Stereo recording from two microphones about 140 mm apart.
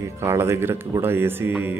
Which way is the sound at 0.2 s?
20° right (ahead or behind).